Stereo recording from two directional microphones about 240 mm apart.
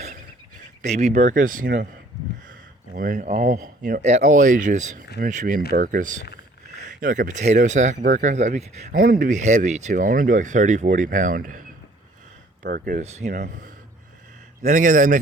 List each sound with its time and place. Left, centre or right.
0.8 s speech: right
12.6 s speech: right